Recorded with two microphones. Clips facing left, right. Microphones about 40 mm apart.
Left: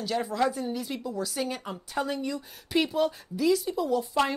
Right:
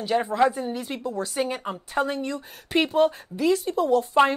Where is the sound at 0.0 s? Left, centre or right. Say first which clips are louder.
Right 6 dB; right.